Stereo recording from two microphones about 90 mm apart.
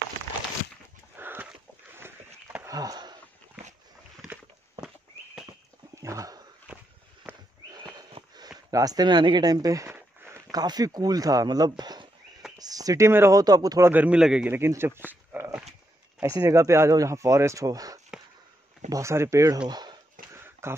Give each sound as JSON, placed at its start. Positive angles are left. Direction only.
{"t": 1.1, "sound": "a sound", "side_deg": -25}
{"t": 2.7, "sound": "wheeze", "side_deg": -45}
{"t": 5.9, "sound": "dog", "side_deg": -35}
{"t": 6.7, "sound": "walk", "side_deg": -10}
{"t": 7.7, "sound": "horse", "side_deg": -50}
{"t": 8.6, "sound": "speech", "side_deg": -40}
{"t": 12.5, "sound": "a sound", "side_deg": -45}
{"t": 13.4, "sound": "speech", "side_deg": -45}
{"t": 13.8, "sound": "a man's voice", "side_deg": -15}
{"t": 14.5, "sound": "speech", "side_deg": -30}
{"t": 16.2, "sound": "speech", "side_deg": -40}
{"t": 19.7, "sound": "a sound", "side_deg": -50}
{"t": 20.3, "sound": "a sound", "side_deg": -25}